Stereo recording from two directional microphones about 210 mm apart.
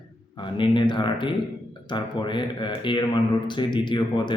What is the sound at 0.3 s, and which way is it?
A man's voice, 25° left (ahead or behind).